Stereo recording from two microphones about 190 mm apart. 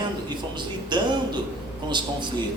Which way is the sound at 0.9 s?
25° right (ahead or behind).